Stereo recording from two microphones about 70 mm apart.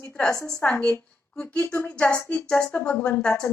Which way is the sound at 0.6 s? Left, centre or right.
Left.